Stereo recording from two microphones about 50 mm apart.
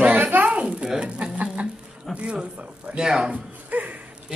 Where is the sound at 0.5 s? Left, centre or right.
Right.